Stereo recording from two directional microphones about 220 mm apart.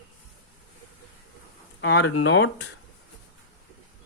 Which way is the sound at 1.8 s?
55° left (ahead or behind).